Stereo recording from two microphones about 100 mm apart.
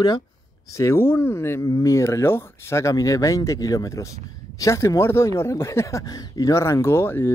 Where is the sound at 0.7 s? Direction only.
30° left (ahead or behind).